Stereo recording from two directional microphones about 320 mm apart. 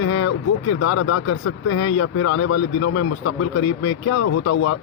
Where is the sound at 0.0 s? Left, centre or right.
Left.